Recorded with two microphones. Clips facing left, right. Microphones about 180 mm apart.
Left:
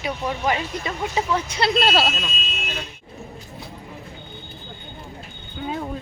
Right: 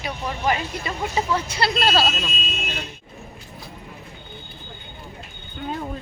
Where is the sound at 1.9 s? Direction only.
Centre (ahead or behind).